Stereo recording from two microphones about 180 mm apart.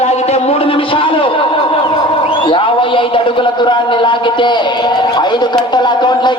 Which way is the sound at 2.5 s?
30° left (ahead or behind).